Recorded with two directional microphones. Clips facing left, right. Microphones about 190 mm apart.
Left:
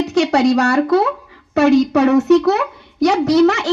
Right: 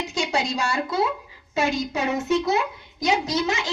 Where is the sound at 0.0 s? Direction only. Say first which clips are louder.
Left 12 dB; 70° left (ahead or behind).